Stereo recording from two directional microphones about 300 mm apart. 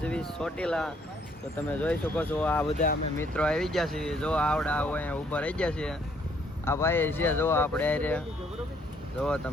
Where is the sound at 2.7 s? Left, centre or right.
Left.